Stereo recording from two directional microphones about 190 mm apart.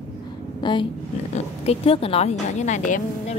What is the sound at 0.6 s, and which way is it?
Speech, 25° left (ahead or behind).